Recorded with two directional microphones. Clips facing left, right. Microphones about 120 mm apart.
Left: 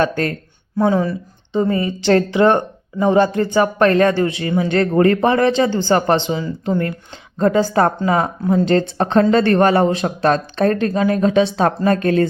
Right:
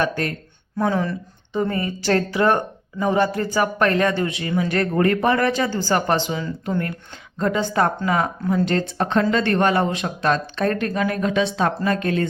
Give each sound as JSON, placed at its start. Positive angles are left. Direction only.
{"t": 0.8, "sound": "speech", "side_deg": 20}